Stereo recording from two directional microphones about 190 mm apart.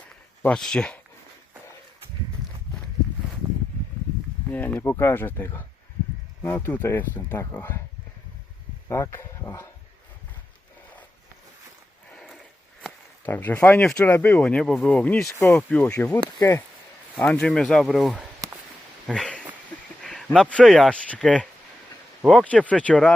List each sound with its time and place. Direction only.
0.4 s speech: 5° left (ahead or behind)
4.5 s speech: 10° left (ahead or behind)
8.9 s speech: 15° left (ahead or behind)
12.1 s a sound: centre (ahead or behind)
12.8 s speech: 10° left (ahead or behind)
19.0 s a sound: 5° left (ahead or behind)
20.0 s speech: centre (ahead or behind)